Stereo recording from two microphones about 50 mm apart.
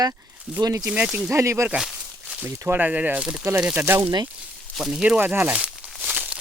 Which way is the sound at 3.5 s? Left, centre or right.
Right.